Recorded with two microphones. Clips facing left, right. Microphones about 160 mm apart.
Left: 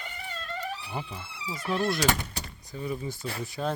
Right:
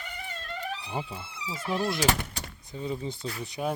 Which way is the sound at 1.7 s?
20° right (ahead or behind).